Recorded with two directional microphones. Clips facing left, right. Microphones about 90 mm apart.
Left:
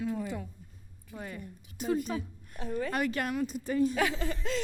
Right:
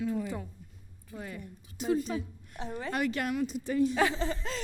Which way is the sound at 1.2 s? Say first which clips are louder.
Left 3 dB; 45° left (ahead or behind).